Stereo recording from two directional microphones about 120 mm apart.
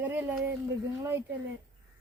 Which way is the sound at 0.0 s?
15° right (ahead or behind).